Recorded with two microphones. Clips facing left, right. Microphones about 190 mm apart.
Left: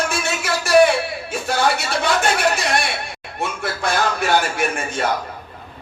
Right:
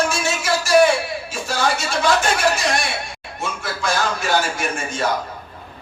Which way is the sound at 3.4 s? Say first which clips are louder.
Left 2 dB; 60° left (ahead or behind).